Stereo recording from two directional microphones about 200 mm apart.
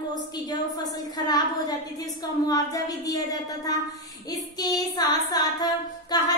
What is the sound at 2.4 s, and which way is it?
Child singing, 20° left (ahead or behind).